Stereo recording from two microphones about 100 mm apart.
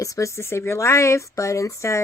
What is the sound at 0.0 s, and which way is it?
Speech, 30° left (ahead or behind).